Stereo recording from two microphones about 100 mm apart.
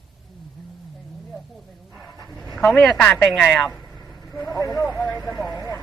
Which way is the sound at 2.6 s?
5° left (ahead or behind).